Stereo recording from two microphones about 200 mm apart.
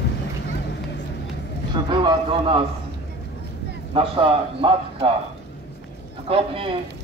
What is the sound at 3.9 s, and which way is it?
A man's voice, 25° right (ahead or behind).